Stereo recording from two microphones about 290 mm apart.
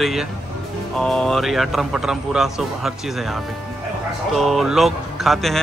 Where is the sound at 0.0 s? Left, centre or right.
Centre.